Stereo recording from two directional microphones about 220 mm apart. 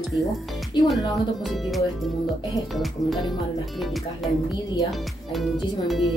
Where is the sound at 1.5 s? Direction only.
Centre (ahead or behind).